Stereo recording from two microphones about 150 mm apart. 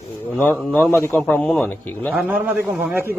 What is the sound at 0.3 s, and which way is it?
A man's voice, 10° left (ahead or behind).